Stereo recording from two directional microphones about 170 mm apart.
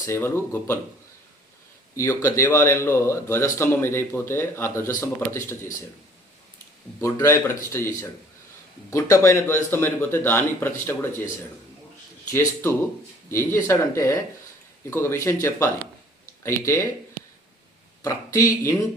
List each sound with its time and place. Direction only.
0.0 s speech: 15° left (ahead or behind)
2.0 s speech: 15° left (ahead or behind)
7.0 s speech: 15° left (ahead or behind)
8.9 s speech: 15° left (ahead or behind)
12.3 s speech: 15° left (ahead or behind)
18.0 s speech: 20° left (ahead or behind)